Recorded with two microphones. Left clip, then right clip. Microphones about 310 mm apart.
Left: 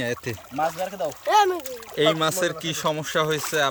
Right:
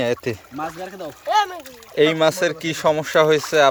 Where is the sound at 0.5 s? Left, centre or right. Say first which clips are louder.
Left 3 dB; left.